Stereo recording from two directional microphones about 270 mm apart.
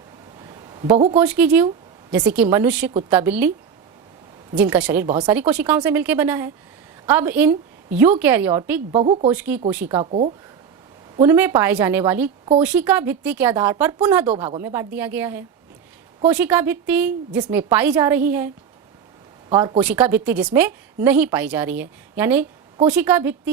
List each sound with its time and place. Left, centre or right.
0.4 s a sound: centre
1.1 s a woman's voice: centre
4.5 s a woman's voice: centre
5.0 s a woman's voice: centre
5.3 s a woman's voice: centre
8.9 s a woman's voice: right
9.3 s a woman's voice: centre
9.9 s a woman's voice: right
11.2 s a woman's voice: centre